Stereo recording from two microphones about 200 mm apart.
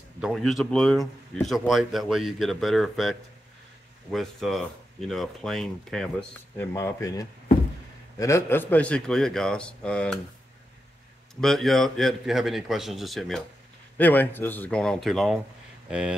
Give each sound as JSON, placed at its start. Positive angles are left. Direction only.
{"t": 0.2, "sound": "a man's voice", "side_deg": 0}
{"t": 6.6, "sound": "a man's voice", "side_deg": 15}
{"t": 11.4, "sound": "a man's voice", "side_deg": 0}